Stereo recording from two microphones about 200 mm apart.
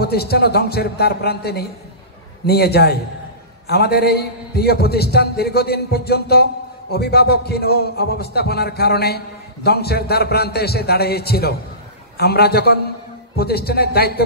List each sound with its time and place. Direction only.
0.0 s a man's voice: 50° left (ahead or behind)